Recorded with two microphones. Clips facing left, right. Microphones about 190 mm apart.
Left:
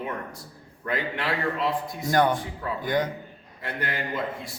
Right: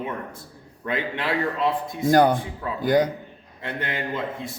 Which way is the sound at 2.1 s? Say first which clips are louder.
Right 5 dB; 35° right (ahead or behind).